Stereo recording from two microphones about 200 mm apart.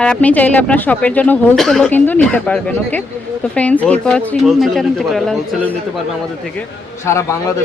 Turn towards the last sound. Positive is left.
turn(degrees=15)  # may be behind; listen again after turning